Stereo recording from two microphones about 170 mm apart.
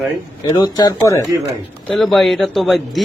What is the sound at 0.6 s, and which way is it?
Speech, 25° left (ahead or behind).